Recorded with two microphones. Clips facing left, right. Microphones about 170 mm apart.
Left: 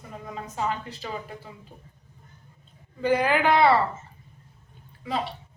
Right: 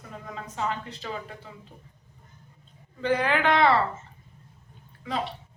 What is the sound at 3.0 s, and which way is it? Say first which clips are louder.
Speech: left 2 dB; 10° left (ahead or behind).